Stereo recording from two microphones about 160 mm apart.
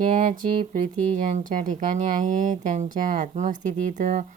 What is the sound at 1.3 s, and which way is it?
A woman's voice, 55° right (ahead or behind).